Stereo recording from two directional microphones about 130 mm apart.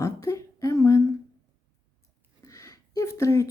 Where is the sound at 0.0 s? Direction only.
25° left (ahead or behind).